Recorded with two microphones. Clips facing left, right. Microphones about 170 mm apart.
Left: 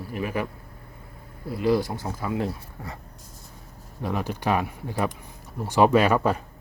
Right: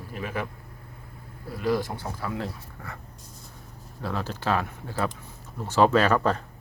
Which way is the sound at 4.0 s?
15° left (ahead or behind).